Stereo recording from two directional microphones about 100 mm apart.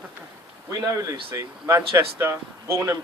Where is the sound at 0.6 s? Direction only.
30° right (ahead or behind).